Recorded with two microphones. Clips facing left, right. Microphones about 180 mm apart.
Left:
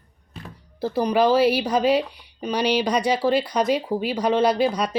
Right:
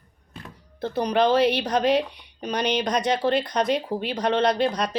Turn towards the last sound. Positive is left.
turn(degrees=10)  # may be behind; listen again after turning